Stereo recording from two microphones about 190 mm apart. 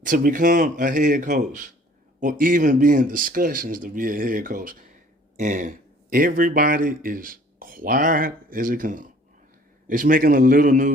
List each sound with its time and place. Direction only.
0.0 s speech: 45° right (ahead or behind)